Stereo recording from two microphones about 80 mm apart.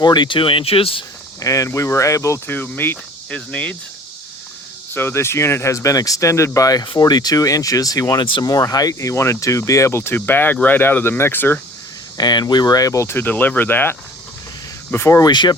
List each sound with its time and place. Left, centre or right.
0.0 s speech: left
1.4 s speech: left
2.5 s speech: left
3.2 s speech: centre
4.9 s speech: left
8.2 s speech: left
8.4 s speech: left
12.1 s speech: left
14.9 s speech: left
15.2 s speech: left